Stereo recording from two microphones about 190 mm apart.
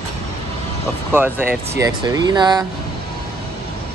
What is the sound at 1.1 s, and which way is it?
Speech, 10° right (ahead or behind).